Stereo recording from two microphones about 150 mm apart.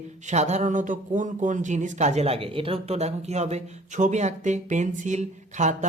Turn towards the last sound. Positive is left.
turn(degrees=-55)  # may be behind; listen again after turning